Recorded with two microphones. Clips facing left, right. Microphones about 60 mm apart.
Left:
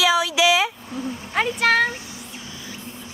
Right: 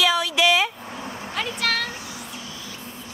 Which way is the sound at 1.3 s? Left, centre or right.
Left.